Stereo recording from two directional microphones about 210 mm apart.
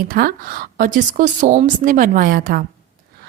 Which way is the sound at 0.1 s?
40° right (ahead or behind).